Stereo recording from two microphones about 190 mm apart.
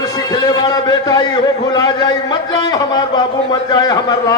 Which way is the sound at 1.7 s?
20° left (ahead or behind).